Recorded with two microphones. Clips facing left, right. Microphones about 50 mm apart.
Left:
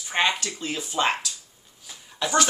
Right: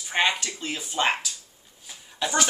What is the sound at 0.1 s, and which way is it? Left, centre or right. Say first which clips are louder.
Speech: even; centre.